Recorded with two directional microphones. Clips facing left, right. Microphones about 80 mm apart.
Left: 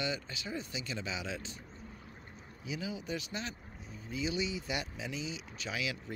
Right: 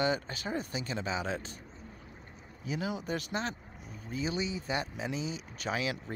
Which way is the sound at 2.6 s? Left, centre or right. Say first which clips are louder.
Right 5 dB; right.